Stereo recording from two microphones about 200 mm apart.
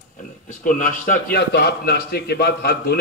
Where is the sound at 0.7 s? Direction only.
40° left (ahead or behind).